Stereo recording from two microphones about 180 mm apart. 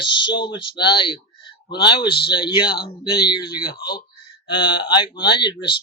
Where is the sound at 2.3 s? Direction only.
25° left (ahead or behind).